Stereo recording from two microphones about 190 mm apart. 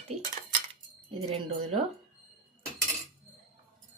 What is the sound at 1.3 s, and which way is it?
Speech, 30° right (ahead or behind).